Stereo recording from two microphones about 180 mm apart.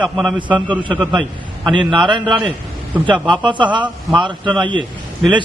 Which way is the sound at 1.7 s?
25° right (ahead or behind).